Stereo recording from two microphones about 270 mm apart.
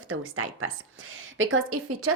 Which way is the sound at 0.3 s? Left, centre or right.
Right.